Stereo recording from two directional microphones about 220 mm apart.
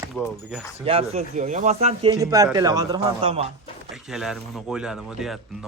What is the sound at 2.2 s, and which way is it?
Speech, 15° right (ahead or behind).